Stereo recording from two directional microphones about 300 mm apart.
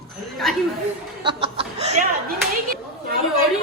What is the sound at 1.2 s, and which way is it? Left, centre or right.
Chuckle, centre.